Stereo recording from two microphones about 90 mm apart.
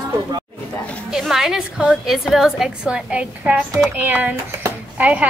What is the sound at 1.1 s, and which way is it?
A woman's voice, 5° right (ahead or behind).